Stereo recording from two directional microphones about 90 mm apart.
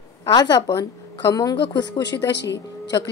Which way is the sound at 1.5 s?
65° left (ahead or behind).